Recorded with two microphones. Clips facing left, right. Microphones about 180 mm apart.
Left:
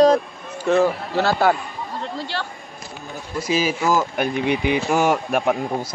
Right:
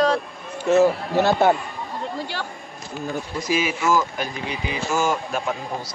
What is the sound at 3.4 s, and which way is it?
Speech, 35° left (ahead or behind).